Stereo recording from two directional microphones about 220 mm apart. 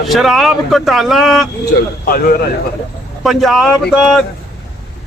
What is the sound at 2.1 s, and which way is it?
Speech, 40° left (ahead or behind).